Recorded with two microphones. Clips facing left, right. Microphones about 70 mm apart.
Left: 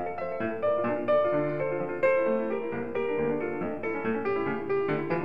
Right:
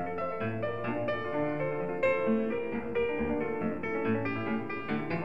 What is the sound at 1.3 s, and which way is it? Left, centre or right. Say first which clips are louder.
Music: left 4 dB; left.